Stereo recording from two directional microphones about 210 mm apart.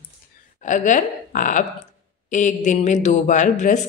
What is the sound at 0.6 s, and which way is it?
A woman's voice, 35° left (ahead or behind).